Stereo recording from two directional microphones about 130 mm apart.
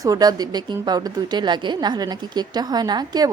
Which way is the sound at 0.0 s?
30° right (ahead or behind).